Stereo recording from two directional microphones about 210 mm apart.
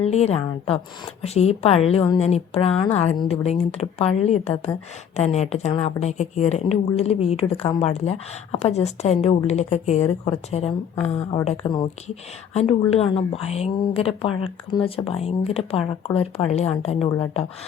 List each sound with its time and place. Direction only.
0.0 s speech: 30° left (ahead or behind)